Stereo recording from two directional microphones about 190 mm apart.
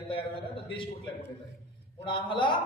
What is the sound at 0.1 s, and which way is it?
Speech, 30° left (ahead or behind).